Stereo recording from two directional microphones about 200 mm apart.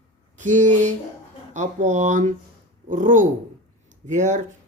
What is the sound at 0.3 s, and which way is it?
Speech, 40° right (ahead or behind).